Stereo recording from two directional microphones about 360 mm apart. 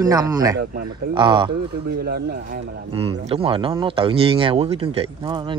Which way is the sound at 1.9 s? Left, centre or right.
Right.